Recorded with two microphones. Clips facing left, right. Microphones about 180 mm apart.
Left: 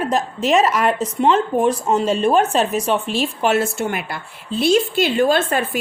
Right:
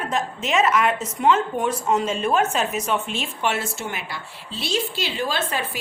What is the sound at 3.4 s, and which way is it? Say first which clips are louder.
A woman's voice: left 7 dB; 45° left (ahead or behind).